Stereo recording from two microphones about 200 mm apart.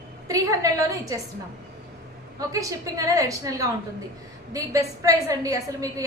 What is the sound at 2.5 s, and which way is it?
A woman's voice, 15° right (ahead or behind).